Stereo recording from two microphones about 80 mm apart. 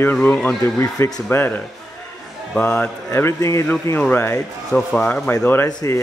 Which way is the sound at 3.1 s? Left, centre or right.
Left.